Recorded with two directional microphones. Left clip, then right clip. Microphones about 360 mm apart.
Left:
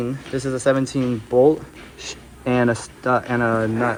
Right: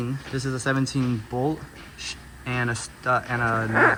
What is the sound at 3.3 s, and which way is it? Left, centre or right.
Speech, left.